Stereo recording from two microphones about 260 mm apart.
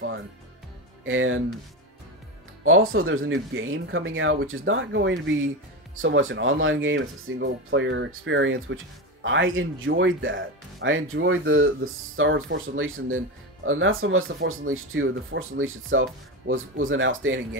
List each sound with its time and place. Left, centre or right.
1.0 s speech: right
2.6 s speech: right